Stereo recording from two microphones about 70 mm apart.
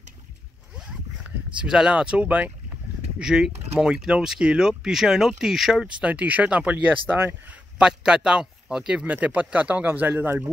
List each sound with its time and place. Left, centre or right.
1.6 s speech: centre
3.2 s speech: centre
5.9 s speech: centre
9.0 s speech: right